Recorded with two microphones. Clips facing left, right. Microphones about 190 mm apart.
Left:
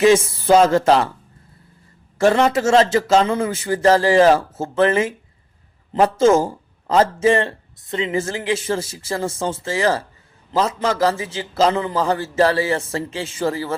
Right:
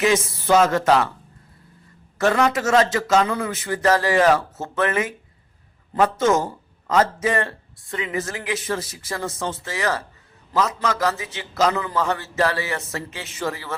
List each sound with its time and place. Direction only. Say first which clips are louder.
0.0 s speech: left 6 dB; 30° left (ahead or behind)
2.1 s speech: left 4 dB; 30° left (ahead or behind)